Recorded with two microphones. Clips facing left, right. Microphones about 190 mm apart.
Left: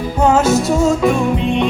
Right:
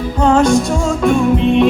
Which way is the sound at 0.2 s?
5° left (ahead or behind).